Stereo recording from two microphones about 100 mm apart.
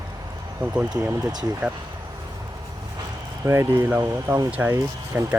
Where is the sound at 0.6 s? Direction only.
20° right (ahead or behind).